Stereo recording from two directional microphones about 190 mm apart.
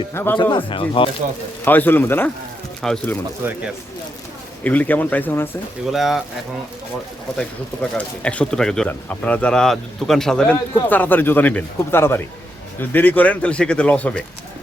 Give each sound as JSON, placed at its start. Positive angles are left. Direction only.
{"t": 0.1, "sound": "speech", "side_deg": 15}
{"t": 0.5, "sound": "speech", "side_deg": 25}
{"t": 1.6, "sound": "speech", "side_deg": 10}
{"t": 3.4, "sound": "speech", "side_deg": -10}
{"t": 4.6, "sound": "speech", "side_deg": 10}
{"t": 5.9, "sound": "speech", "side_deg": 0}
{"t": 7.3, "sound": "speech", "side_deg": 5}